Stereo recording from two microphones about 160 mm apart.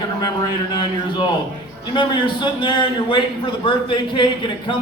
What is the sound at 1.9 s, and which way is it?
Speech, 30° left (ahead or behind).